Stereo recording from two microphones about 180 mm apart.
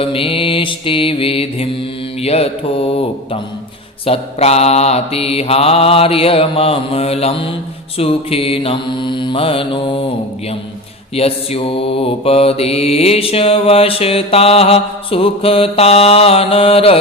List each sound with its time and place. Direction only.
0.0 s mantra: 30° left (ahead or behind)
11.1 s mantra: 35° left (ahead or behind)